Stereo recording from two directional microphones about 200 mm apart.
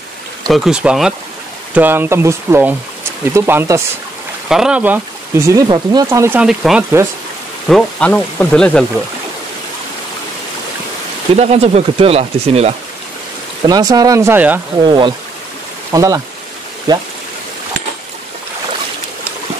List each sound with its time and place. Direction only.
0.5 s speech: 5° right (ahead or behind)
6.4 s speech: 5° right (ahead or behind)
11.3 s speech: 30° right (ahead or behind)
13.7 s speech: 20° right (ahead or behind)
14.9 s speech: 25° right (ahead or behind)